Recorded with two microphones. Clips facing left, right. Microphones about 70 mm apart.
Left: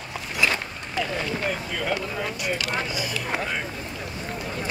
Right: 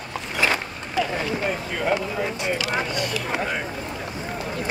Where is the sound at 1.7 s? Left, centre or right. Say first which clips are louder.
Right 4 dB; right.